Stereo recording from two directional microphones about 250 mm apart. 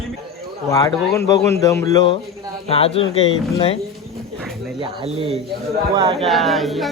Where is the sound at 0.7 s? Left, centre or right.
Centre.